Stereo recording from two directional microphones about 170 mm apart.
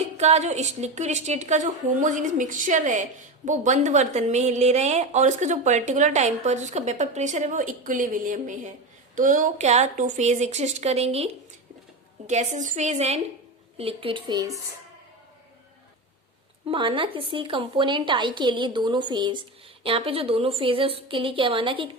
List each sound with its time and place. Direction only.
0.0 s a woman's voice: 40° right (ahead or behind)
12.3 s a woman's voice: 45° right (ahead or behind); by 14.6 s 20° right (ahead or behind)
16.6 s a woman's voice: 30° right (ahead or behind)